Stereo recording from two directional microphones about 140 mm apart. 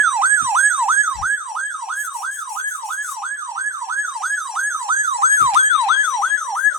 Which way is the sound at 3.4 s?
20° right (ahead or behind).